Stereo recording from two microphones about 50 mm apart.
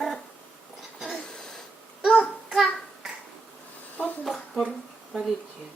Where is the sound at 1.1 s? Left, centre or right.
Centre.